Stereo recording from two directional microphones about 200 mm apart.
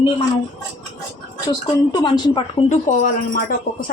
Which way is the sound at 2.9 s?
45° left (ahead or behind).